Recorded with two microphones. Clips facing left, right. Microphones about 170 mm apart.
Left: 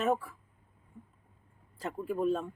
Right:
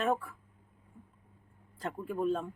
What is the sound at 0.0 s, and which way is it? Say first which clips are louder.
Speech: left 1 dB; centre (ahead or behind).